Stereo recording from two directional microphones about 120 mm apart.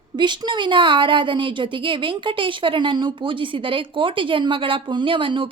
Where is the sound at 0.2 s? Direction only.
40° right (ahead or behind).